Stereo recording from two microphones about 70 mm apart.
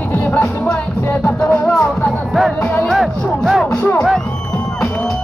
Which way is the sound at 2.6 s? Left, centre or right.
Left.